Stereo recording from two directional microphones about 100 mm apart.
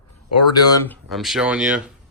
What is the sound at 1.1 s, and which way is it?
Speech, centre (ahead or behind).